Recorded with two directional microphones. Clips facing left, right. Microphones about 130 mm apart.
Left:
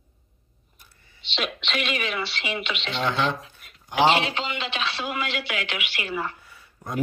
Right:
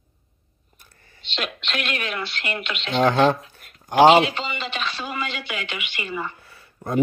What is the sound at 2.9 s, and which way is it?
Speech, 45° right (ahead or behind).